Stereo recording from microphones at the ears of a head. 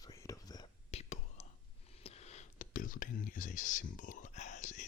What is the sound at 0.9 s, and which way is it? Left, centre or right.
Whispering, left.